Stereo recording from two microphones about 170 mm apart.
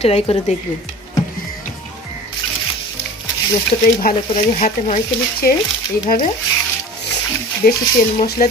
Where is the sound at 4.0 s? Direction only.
55° left (ahead or behind).